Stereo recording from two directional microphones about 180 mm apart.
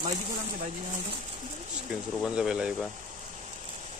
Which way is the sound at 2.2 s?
5° right (ahead or behind).